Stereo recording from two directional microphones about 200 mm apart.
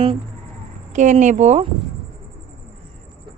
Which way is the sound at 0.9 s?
35° right (ahead or behind).